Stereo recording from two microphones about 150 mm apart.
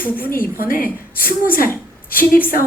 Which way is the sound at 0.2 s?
75° left (ahead or behind).